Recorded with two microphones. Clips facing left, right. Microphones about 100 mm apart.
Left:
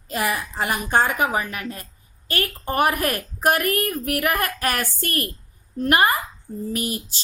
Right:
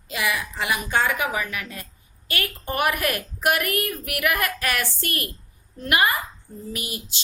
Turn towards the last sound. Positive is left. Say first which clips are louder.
# left 6 dB
turn(degrees=40)  # may be behind; listen again after turning